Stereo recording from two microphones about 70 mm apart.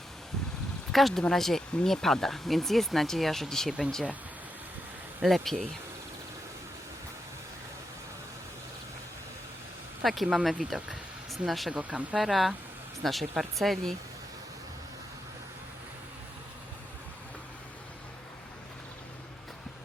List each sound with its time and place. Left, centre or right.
0.9 s speech: centre
5.2 s speech: centre
10.0 s speech: centre
11.7 s speech: centre
12.1 s speech: centre